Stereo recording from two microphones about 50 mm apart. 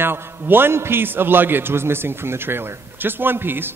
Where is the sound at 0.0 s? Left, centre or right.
Right.